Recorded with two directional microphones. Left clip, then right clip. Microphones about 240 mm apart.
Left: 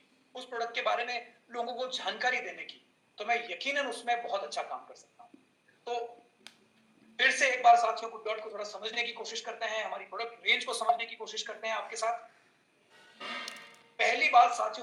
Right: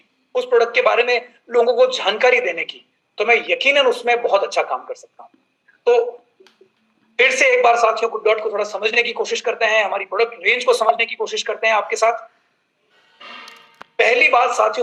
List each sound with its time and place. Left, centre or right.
0.5 s speech: right
7.3 s speech: right
14.0 s speech: right